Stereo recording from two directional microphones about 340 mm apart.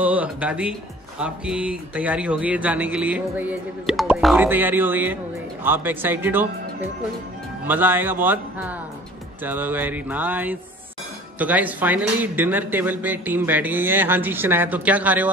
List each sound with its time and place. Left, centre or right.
0.0 s speech: centre
7.6 s speech: centre